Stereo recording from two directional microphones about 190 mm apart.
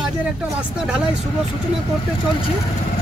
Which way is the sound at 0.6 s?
5° right (ahead or behind).